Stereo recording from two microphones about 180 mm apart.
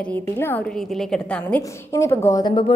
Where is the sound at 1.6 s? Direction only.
15° left (ahead or behind).